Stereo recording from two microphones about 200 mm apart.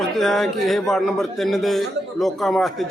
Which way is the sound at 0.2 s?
Centre (ahead or behind).